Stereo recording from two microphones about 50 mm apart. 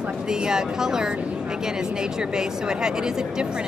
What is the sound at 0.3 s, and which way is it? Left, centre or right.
Speech, centre.